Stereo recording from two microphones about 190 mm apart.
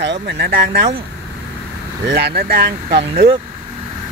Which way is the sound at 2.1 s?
60° right (ahead or behind).